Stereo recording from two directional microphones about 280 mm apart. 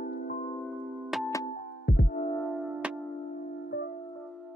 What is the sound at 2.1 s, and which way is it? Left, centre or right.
Music, centre.